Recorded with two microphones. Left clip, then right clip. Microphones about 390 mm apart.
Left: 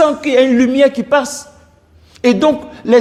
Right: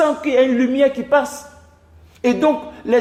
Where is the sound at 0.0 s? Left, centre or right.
Left.